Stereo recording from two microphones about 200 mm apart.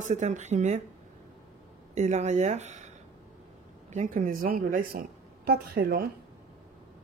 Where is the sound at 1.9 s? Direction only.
35° right (ahead or behind).